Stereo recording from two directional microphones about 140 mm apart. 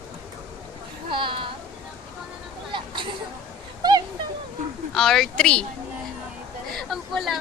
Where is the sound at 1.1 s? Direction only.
35° right (ahead or behind).